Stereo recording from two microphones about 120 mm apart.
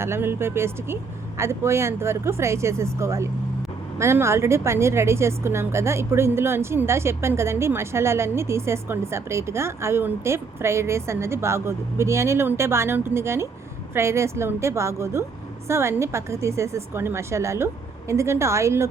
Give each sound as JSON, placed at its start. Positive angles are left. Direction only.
{"t": 0.0, "sound": "speech", "side_deg": -20}